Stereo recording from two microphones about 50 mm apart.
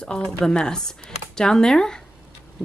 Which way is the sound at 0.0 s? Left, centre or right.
Centre.